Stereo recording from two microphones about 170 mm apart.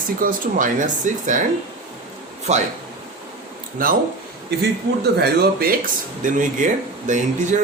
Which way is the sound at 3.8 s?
55° right (ahead or behind).